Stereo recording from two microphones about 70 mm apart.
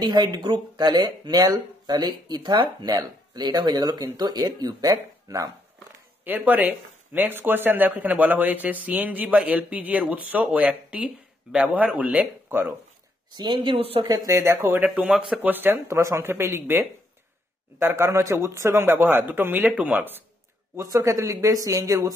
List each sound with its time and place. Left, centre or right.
0.0 s speech: right
4.0 s speech: right
6.2 s speech: right
14.0 s speech: right
14.7 s speech: right
15.1 s speech: centre
15.4 s speech: right
15.9 s speech: right
20.8 s speech: right